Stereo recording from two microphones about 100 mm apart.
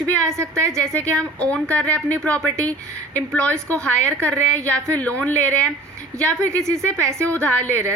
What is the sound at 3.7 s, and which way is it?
A woman's voice, 15° left (ahead or behind).